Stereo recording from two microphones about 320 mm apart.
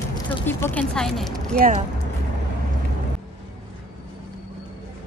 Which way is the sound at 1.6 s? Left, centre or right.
Right.